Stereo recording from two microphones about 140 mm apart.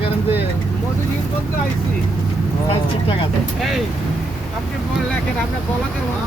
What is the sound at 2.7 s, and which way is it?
Speech, 40° left (ahead or behind).